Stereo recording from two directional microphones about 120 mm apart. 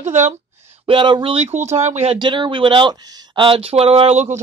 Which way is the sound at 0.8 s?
45° right (ahead or behind).